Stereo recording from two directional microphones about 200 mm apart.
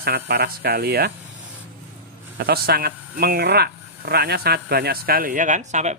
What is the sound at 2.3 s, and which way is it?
Speech, 50° right (ahead or behind).